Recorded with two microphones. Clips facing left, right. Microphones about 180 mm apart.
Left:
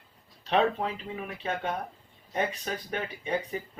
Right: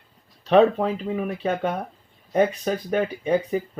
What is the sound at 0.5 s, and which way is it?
Speech, 40° right (ahead or behind).